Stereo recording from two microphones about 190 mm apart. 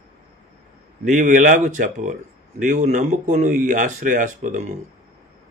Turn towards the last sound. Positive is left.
turn(degrees=-40)  # may be behind; listen again after turning